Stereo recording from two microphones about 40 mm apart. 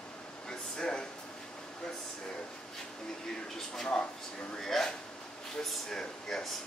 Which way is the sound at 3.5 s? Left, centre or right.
Centre.